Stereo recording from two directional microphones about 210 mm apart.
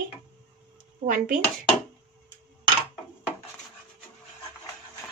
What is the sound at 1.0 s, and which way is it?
Speech, 40° right (ahead or behind).